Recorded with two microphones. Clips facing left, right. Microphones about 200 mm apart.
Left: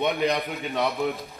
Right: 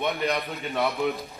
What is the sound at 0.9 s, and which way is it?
Speech, centre (ahead or behind).